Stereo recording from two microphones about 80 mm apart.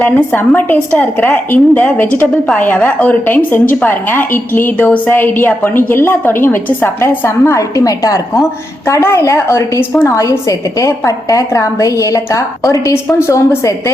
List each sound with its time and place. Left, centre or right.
0.0 s a woman's voice: centre; by 8.4 s left
8.9 s a woman's voice: left